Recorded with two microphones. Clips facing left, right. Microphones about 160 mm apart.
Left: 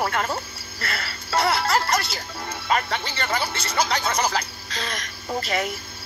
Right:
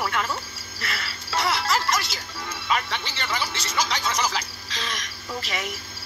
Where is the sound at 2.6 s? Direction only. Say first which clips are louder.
Left 3 dB; 45° left (ahead or behind).